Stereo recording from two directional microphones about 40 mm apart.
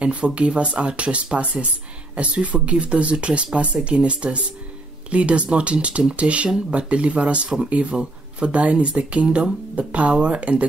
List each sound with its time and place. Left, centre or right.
0.0 s speech: right